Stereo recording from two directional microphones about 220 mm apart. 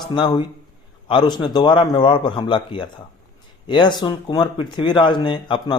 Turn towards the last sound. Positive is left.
turn(degrees=20)  # may be behind; listen again after turning